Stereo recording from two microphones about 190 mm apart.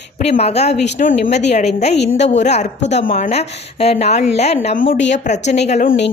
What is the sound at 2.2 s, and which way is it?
A woman's voice, 35° left (ahead or behind).